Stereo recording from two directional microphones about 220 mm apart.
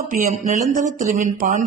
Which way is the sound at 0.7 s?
35° right (ahead or behind).